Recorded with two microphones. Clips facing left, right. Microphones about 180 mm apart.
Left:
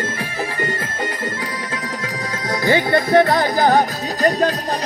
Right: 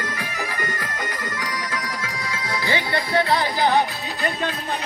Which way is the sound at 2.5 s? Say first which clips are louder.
Left 8 dB; 45° left (ahead or behind).